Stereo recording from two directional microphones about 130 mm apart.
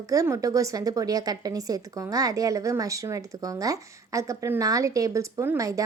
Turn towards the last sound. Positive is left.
turn(degrees=-25)  # may be behind; listen again after turning